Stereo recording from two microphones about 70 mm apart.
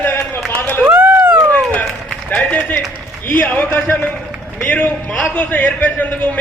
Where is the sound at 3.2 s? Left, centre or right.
Left.